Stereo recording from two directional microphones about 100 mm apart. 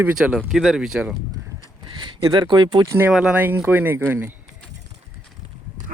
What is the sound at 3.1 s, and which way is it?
Speech, 10° right (ahead or behind).